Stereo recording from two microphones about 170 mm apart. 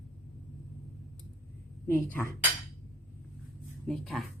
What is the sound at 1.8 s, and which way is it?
Speech, 15° left (ahead or behind).